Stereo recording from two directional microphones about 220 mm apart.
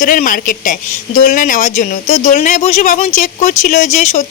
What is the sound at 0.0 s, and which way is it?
Speech, 40° left (ahead or behind).